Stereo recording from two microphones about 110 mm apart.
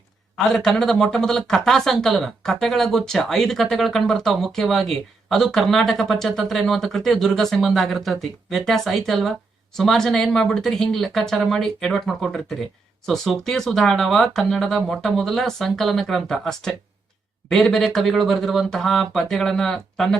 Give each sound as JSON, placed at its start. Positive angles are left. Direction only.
{"t": 0.5, "sound": "speech", "side_deg": 5}